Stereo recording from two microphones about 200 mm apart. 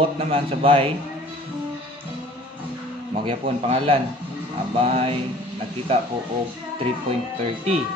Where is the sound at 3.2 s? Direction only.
30° right (ahead or behind).